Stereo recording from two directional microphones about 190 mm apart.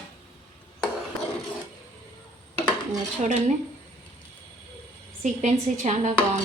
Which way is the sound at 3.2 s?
35° right (ahead or behind).